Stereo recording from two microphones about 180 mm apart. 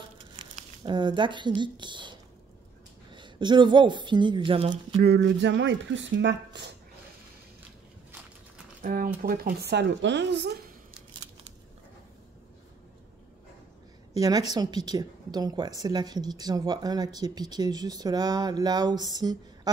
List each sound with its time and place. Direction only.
0.8 s speech: 25° right (ahead or behind)
5.0 s speech: 70° right (ahead or behind); by 6.6 s 85° right
8.8 s a woman's voice: 50° right (ahead or behind); by 10.7 s 70° right (ahead or behind)
14.1 s speech: 20° right (ahead or behind)